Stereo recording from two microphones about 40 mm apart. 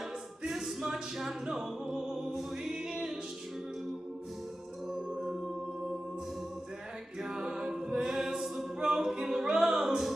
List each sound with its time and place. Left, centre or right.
0.4 s a capella: centre
1.1 s music: centre
7.2 s a capella: centre
9.6 s music: centre